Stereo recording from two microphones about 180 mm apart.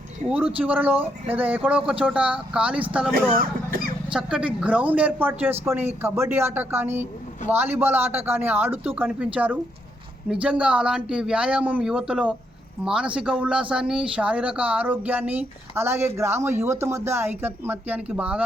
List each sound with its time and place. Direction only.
0.3 s speech: 5° right (ahead or behind)
3.1 s speech: 55° right (ahead or behind)
4.1 s speech: 5° right (ahead or behind)